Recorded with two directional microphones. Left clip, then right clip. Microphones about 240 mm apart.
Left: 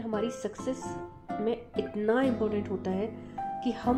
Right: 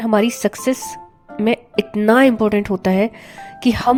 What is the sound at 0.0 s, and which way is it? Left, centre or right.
A woman's voice, right.